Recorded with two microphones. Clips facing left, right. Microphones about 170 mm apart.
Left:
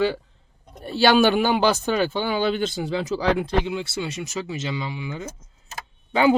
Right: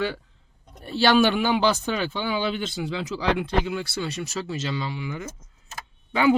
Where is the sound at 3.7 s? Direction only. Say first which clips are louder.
Left 1 dB; 20° left (ahead or behind).